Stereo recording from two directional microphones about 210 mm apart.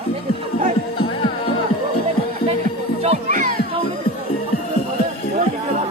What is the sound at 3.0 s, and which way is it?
Children playing, 30° right (ahead or behind).